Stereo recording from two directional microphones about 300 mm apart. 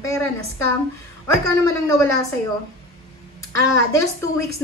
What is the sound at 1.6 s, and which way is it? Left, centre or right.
Speech, centre.